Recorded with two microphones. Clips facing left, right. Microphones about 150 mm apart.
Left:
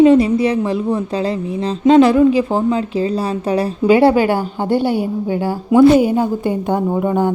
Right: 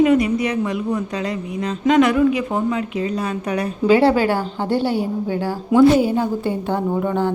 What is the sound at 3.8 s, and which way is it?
A woman's voice, 15° left (ahead or behind).